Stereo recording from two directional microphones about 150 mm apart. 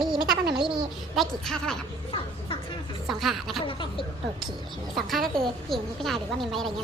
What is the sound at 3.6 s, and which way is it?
Speech, 35° left (ahead or behind).